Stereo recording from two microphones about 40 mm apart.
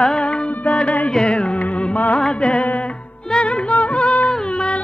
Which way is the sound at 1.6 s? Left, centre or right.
Left.